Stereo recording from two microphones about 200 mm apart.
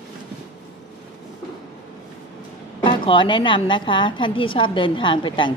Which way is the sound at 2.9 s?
25° left (ahead or behind).